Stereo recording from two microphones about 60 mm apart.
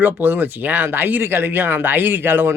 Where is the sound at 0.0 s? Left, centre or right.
Right.